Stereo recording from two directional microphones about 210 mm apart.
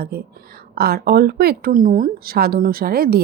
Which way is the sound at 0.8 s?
50° right (ahead or behind).